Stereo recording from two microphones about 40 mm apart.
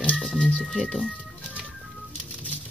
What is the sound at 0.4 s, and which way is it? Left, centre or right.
Music, left.